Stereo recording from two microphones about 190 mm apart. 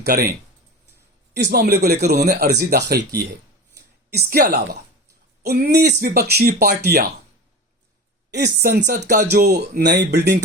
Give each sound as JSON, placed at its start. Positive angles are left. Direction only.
{"t": 0.0, "sound": "speech", "side_deg": -55}
{"t": 1.4, "sound": "speech", "side_deg": -55}
{"t": 4.1, "sound": "speech", "side_deg": -55}
{"t": 8.3, "sound": "speech", "side_deg": -60}